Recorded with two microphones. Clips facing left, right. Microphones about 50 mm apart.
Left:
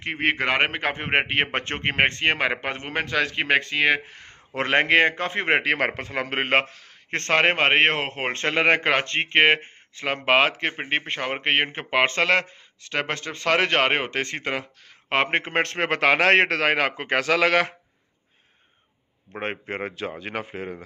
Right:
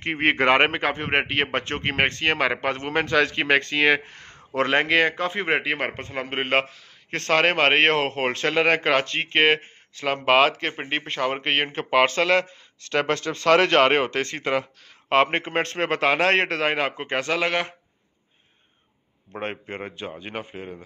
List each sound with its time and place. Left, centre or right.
0.1 s speech: right
0.8 s speech: left
2.9 s speech: centre
4.6 s speech: left
5.9 s a man's voice: left
7.4 s speech: left
8.3 s speech: left
12.8 s a man's voice: centre; by 17.4 s left
19.4 s a man's voice: left
19.7 s speech: left
20.2 s speech: left